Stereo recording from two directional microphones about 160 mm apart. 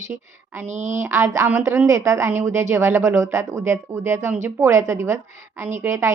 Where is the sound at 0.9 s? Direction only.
15° right (ahead or behind).